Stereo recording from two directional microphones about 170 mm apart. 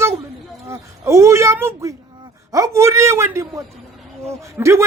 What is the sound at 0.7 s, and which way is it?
A man's voice, 15° right (ahead or behind).